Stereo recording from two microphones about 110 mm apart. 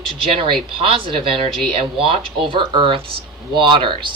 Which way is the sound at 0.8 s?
55° right (ahead or behind).